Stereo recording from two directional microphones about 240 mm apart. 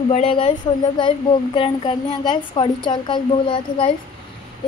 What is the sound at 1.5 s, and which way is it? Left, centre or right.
A woman's voice, left.